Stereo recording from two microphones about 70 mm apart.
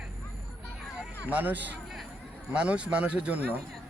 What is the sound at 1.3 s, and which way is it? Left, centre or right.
Speech, right.